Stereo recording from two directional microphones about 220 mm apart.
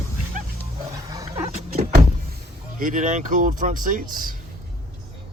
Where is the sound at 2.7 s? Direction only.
35° right (ahead or behind).